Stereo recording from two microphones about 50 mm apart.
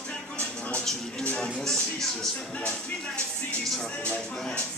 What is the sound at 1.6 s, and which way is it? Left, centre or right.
Music, centre.